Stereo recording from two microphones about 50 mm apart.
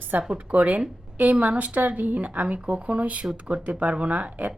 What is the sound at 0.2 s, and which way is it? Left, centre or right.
A woman's voice, right.